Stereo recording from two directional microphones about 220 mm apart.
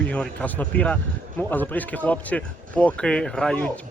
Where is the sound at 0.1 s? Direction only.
5° left (ahead or behind).